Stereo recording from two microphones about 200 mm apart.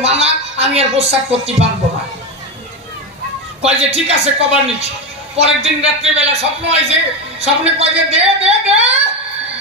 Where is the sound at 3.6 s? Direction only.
30° right (ahead or behind).